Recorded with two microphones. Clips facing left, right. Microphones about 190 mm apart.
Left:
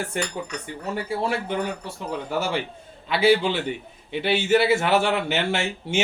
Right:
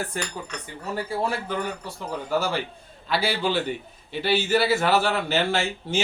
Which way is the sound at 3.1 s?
20° left (ahead or behind).